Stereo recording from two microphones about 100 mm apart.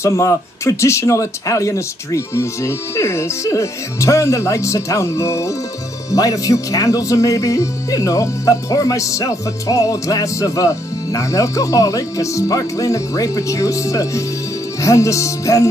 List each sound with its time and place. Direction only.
0.0 s speech: 30° left (ahead or behind)